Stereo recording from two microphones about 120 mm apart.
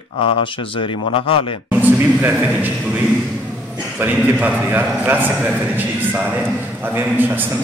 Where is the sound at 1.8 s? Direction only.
15° right (ahead or behind).